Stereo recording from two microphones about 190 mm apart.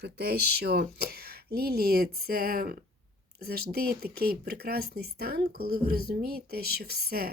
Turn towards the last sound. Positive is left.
turn(degrees=-55)  # may be behind; listen again after turning